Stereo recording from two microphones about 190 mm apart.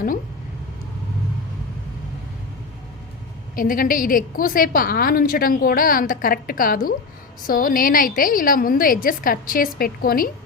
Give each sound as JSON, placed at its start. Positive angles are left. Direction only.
{"t": 3.5, "sound": "a woman's voice", "side_deg": 45}